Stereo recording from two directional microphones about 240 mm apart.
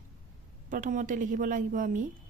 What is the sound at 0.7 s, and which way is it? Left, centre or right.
Speech, right.